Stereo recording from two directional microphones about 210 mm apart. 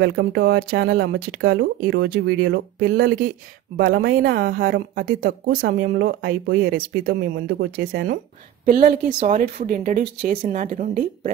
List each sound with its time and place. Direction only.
0.0 s speech: 55° right (ahead or behind)
3.7 s a woman's voice: 60° right (ahead or behind); by 11.3 s 35° right (ahead or behind)